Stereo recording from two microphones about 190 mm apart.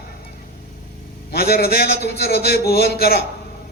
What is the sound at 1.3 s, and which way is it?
A man's voice, 55° left (ahead or behind).